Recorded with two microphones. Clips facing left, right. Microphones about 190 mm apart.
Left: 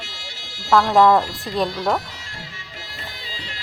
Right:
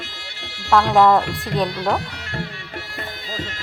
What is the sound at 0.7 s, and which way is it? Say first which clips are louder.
Speech: even; centre (ahead or behind).